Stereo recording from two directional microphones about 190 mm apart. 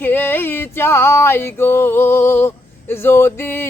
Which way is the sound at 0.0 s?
10° left (ahead or behind).